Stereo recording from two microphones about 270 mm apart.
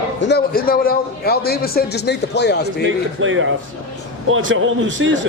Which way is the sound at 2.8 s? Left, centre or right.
Right.